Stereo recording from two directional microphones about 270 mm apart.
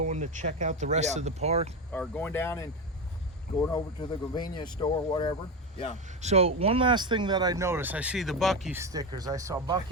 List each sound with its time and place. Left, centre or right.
0.0 s speech: right
1.9 s speech: centre
6.2 s speech: right